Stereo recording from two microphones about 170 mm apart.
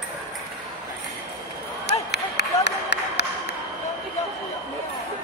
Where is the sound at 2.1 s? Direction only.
85° left.